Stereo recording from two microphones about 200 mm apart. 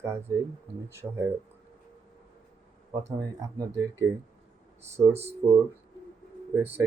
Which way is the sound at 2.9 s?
15° right (ahead or behind).